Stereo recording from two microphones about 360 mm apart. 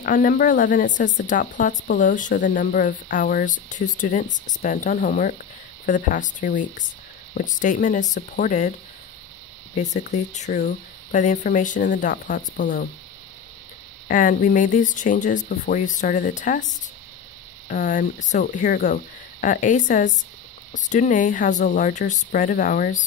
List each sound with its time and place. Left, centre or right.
0.0 s speech: left
9.8 s speech: centre
14.0 s speech: left
17.6 s speech: left